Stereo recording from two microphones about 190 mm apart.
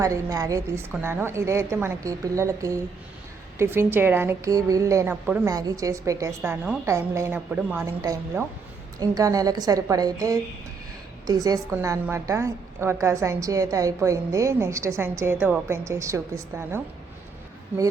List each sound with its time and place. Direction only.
0.0 s a woman's voice: 15° right (ahead or behind)